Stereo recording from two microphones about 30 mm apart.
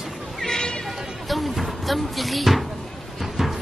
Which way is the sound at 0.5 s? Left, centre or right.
Centre.